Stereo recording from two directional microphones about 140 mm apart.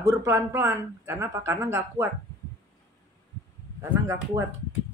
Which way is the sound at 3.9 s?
20° right (ahead or behind).